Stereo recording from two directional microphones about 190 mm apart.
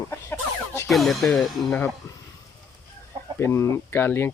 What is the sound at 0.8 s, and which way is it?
Speech, centre (ahead or behind).